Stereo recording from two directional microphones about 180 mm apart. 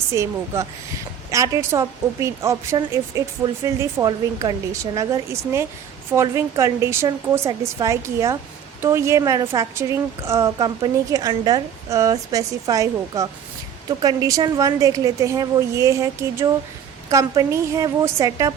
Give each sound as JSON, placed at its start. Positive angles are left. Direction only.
{"t": 0.1, "sound": "a woman's voice", "side_deg": -15}